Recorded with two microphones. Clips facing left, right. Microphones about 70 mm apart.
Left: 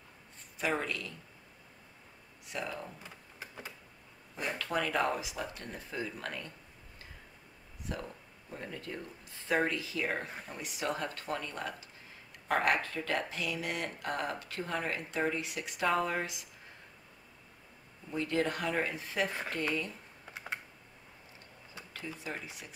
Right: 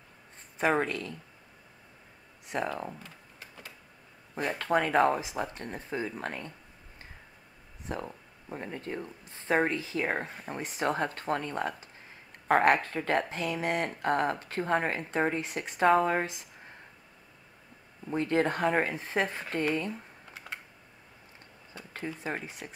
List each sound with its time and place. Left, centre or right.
0.6 s speech: right
2.4 s a sound: right
3.0 s a sound: centre
4.4 s speech: right
7.8 s speech: right
18.1 s speech: right
21.9 s speech: right